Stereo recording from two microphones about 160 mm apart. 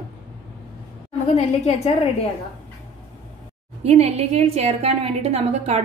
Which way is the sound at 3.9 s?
40° right (ahead or behind).